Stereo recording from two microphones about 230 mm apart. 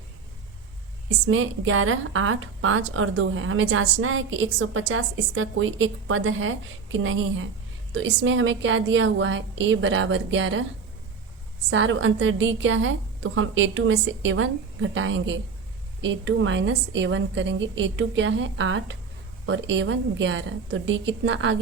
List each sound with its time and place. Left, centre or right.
1.3 s a woman's voice: right
11.7 s a woman's voice: right